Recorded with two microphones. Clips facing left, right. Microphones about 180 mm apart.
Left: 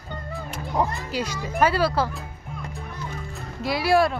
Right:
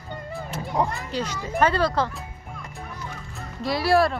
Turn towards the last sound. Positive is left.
turn(degrees=0)  # may be behind; listen again after turning